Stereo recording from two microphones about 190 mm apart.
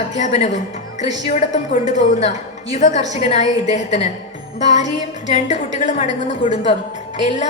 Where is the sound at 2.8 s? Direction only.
40° left (ahead or behind).